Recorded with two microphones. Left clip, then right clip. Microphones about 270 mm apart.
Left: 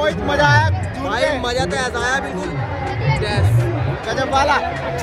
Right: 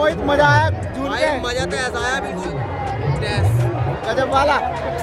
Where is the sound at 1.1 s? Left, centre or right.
Centre.